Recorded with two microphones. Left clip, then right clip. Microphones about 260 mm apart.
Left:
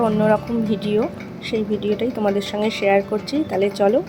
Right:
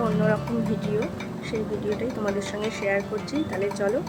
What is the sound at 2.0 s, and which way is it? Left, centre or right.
Speech, centre.